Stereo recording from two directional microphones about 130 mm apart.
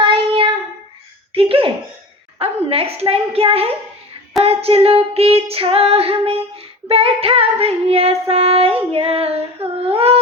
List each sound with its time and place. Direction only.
0.0 s child singing: 40° right (ahead or behind)
1.3 s a sound: 45° right (ahead or behind)
2.4 s a woman's voice: 50° right (ahead or behind)
4.4 s female singing: 50° right (ahead or behind)